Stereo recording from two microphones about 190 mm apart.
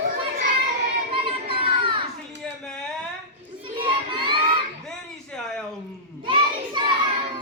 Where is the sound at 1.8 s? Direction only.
25° right (ahead or behind).